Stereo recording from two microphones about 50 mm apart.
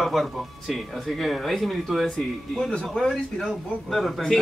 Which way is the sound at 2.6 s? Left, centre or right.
Centre.